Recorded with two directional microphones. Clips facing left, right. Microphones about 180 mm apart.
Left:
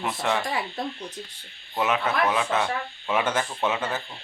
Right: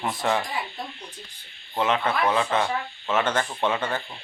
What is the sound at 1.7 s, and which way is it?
Speech, 10° left (ahead or behind).